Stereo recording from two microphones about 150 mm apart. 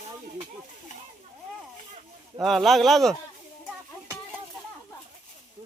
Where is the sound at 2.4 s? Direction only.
Centre (ahead or behind).